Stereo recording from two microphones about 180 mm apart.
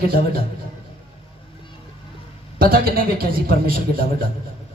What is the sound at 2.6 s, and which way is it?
Speech, 55° right (ahead or behind).